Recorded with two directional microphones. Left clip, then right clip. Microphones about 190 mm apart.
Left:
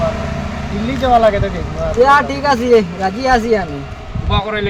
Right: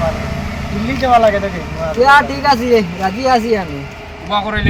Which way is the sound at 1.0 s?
15° left (ahead or behind).